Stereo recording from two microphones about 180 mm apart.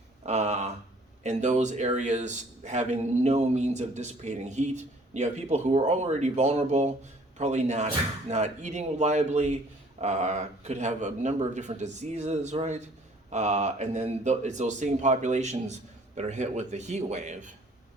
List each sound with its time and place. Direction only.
0.2 s a man's voice: 40° right (ahead or behind)